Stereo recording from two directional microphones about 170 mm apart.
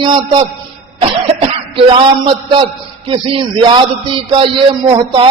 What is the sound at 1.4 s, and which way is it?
A man's voice, 30° right (ahead or behind).